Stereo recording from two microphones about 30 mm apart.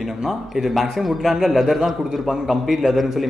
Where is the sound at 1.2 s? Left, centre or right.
Centre.